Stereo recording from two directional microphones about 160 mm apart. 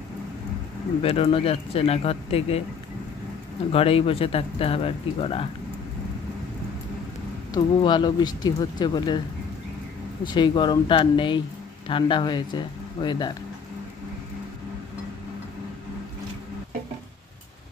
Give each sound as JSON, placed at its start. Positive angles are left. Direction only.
{"t": 1.0, "sound": "speech", "side_deg": 35}
{"t": 3.7, "sound": "speech", "side_deg": 35}
{"t": 7.5, "sound": "speech", "side_deg": 30}
{"t": 10.2, "sound": "speech", "side_deg": 30}